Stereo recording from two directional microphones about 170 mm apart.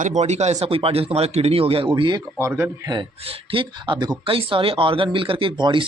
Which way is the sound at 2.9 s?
30° right (ahead or behind).